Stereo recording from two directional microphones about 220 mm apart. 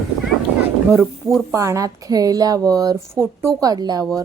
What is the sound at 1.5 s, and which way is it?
A woman's voice, 15° right (ahead or behind).